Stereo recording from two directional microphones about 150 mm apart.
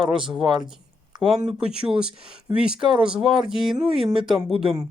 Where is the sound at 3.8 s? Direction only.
35° right (ahead or behind).